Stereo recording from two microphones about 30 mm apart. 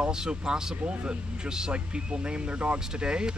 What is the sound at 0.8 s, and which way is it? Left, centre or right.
Speech, right.